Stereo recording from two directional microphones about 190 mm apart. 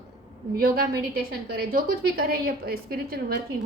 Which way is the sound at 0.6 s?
50° right (ahead or behind).